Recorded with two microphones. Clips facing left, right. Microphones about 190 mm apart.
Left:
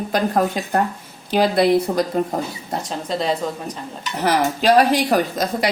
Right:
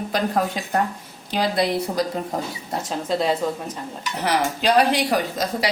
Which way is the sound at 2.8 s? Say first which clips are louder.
Right 1 dB; 5° right (ahead or behind).